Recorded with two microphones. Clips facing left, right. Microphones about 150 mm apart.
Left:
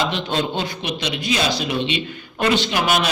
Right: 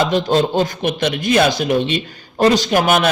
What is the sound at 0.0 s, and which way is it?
A man's voice, 40° right (ahead or behind).